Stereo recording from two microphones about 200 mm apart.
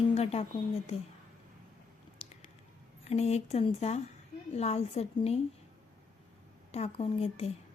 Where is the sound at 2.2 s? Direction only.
30° left (ahead or behind).